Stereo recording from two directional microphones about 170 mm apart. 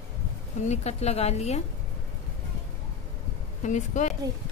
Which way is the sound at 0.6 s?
40° left (ahead or behind).